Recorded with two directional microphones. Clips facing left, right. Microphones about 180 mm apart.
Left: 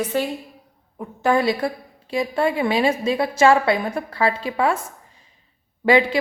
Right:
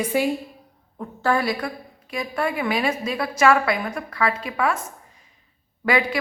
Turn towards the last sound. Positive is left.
turn(degrees=25)  # may be behind; listen again after turning